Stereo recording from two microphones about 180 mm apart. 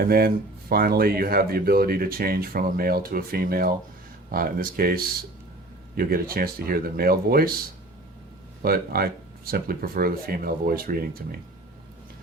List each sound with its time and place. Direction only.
0.0 s speech: 55° right (ahead or behind)
8.6 s speech: 55° right (ahead or behind)